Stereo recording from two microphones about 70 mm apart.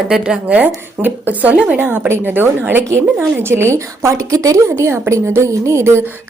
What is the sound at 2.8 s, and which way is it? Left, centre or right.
A woman's voice, right.